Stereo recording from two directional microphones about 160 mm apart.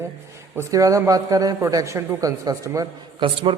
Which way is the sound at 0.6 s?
20° right (ahead or behind).